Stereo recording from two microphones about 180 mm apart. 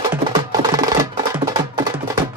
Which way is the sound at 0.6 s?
20° right (ahead or behind).